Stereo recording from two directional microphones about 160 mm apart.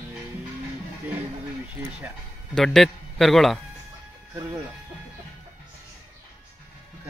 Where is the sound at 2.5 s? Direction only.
Centre (ahead or behind).